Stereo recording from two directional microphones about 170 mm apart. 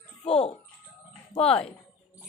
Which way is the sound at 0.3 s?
35° left (ahead or behind).